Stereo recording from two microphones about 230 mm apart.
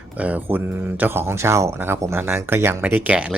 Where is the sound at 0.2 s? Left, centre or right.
Centre.